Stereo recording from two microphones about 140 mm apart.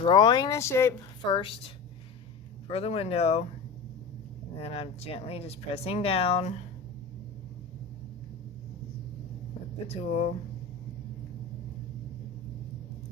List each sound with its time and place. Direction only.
0.0 s speech: 35° left (ahead or behind); by 0.9 s 20° left (ahead or behind)
1.2 s a woman's voice: 35° left (ahead or behind)
4.5 s speech: 45° left (ahead or behind)
9.8 s speech: 50° left (ahead or behind)